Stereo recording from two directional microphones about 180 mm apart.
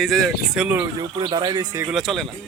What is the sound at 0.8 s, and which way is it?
Speech, 25° right (ahead or behind).